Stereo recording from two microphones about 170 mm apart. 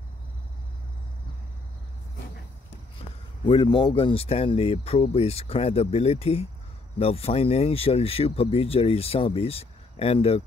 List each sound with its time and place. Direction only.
3.4 s speech: 30° left (ahead or behind)